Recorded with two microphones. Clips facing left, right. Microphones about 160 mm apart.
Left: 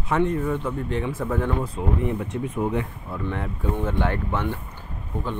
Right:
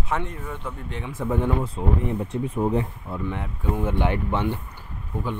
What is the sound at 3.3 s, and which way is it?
Speech, 15° right (ahead or behind).